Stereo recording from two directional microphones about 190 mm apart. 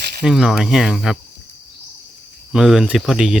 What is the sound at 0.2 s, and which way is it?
Speech, centre (ahead or behind).